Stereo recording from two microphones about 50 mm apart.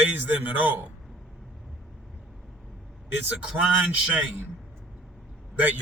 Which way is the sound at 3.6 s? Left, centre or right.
Right.